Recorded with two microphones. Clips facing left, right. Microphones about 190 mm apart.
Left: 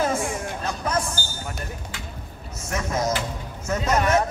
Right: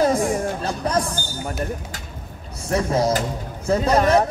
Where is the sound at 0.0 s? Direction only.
35° right (ahead or behind).